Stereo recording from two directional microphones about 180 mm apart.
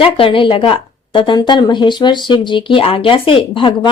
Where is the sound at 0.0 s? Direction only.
30° left (ahead or behind).